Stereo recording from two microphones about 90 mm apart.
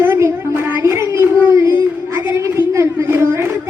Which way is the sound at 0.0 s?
25° right (ahead or behind).